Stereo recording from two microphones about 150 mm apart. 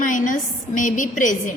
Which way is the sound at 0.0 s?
60° left (ahead or behind).